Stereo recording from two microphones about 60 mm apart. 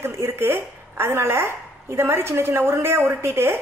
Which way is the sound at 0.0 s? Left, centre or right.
Right.